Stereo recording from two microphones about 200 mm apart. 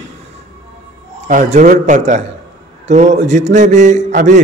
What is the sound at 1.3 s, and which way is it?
A man's voice, 40° right (ahead or behind).